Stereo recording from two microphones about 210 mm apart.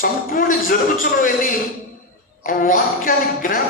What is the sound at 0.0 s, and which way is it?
Speech, 40° left (ahead or behind).